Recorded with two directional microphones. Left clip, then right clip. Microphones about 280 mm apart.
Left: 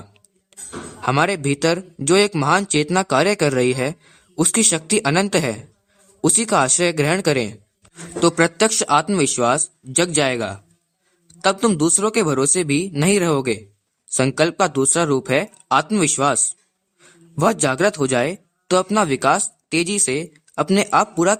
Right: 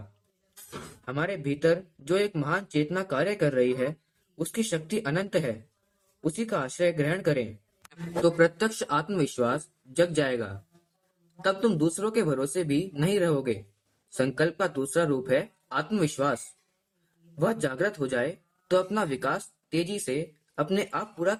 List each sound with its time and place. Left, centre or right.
1.0 s speech: left